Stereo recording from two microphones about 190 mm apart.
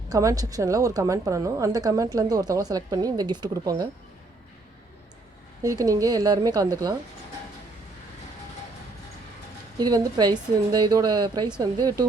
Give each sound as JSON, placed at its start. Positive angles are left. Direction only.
{"t": 0.1, "sound": "a woman's voice", "side_deg": -20}
{"t": 5.6, "sound": "a woman's voice", "side_deg": -20}
{"t": 9.7, "sound": "a woman's voice", "side_deg": -20}